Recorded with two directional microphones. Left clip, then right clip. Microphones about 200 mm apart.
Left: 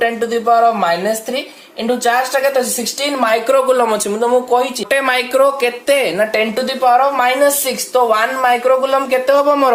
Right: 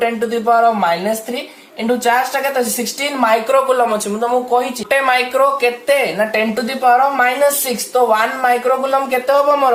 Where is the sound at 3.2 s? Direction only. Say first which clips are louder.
Even; 45° left (ahead or behind).